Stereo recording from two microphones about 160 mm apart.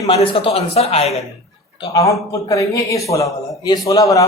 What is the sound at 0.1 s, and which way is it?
Speech, 40° left (ahead or behind).